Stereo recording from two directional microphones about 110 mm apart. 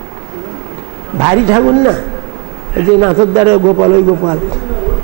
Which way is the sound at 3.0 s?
20° right (ahead or behind).